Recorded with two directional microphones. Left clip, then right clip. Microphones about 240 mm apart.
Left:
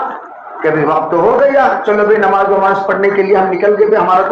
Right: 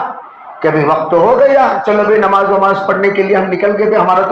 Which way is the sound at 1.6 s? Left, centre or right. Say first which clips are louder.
Even; right.